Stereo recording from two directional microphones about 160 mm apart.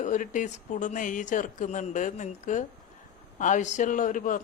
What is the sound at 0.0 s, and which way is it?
Speech, 50° left (ahead or behind).